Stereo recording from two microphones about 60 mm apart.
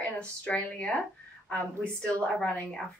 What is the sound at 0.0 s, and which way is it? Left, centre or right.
A woman's voice, left.